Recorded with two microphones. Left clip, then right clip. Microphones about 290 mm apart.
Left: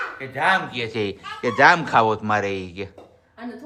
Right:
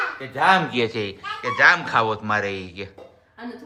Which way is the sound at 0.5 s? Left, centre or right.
Right.